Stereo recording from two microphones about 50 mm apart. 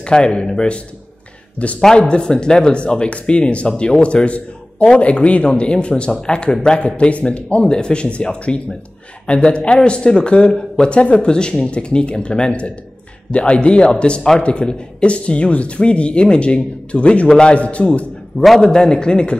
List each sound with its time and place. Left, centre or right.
0.0 s a man's voice: centre
2.0 s speech: left
6.8 s speech: left
18.4 s a man's voice: centre